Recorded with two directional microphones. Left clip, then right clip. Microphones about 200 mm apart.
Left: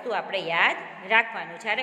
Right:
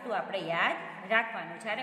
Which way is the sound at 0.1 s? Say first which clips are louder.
Left 5 dB; 10° left (ahead or behind).